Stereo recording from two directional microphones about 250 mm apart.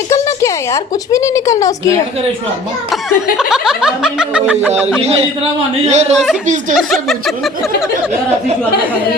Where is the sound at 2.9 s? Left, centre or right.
Centre.